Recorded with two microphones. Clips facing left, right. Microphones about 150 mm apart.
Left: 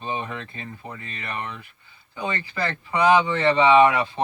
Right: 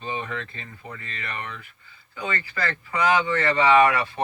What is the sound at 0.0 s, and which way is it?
Speech, 20° left (ahead or behind).